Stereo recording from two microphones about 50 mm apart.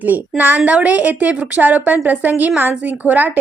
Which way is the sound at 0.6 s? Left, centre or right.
Right.